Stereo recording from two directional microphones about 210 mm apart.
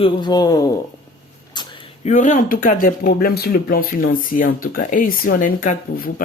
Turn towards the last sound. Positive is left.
turn(degrees=40)  # may be behind; listen again after turning